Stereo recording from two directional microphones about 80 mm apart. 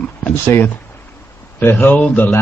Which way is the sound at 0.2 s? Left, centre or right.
Left.